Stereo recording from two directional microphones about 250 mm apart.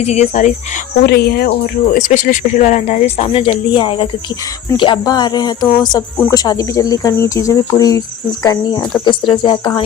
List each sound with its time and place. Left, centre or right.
0.0 s speech: left
1.0 s speech: left; by 9.8 s centre